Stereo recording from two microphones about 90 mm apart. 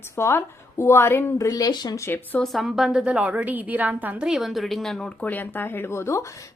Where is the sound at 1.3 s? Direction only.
40° left (ahead or behind).